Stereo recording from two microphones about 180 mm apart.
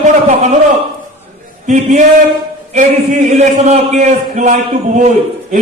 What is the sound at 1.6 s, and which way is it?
A man's voice, 40° right (ahead or behind).